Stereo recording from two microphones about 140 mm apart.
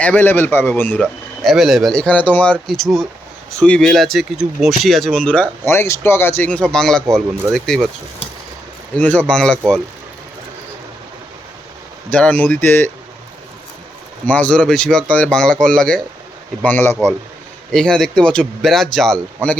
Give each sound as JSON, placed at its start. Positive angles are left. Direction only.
{"t": 0.0, "sound": "a man's voice", "side_deg": 10}
{"t": 1.0, "sound": "speech", "side_deg": 0}
{"t": 5.6, "sound": "a man's voice", "side_deg": 20}
{"t": 9.0, "sound": "a man's voice", "side_deg": 10}
{"t": 12.1, "sound": "a man's voice", "side_deg": 10}
{"t": 14.3, "sound": "a man's voice", "side_deg": 10}